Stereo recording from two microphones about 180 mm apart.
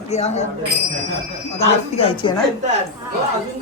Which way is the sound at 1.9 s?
30° left (ahead or behind).